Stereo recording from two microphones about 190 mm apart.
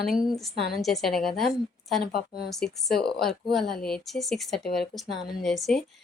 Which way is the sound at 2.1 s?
55° left (ahead or behind).